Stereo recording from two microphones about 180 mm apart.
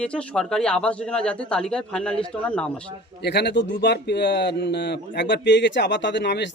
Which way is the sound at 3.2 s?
70° left (ahead or behind).